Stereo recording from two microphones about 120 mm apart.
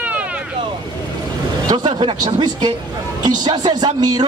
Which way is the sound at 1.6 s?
40° right (ahead or behind).